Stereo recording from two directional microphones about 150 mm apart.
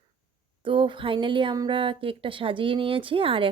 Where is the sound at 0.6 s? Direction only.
35° right (ahead or behind).